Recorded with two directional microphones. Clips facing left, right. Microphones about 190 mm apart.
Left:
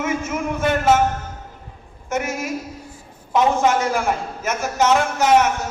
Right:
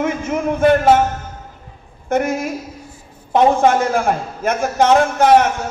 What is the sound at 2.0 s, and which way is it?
A woman's voice, 55° right (ahead or behind).